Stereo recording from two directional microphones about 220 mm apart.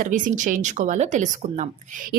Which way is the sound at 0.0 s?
35° right (ahead or behind).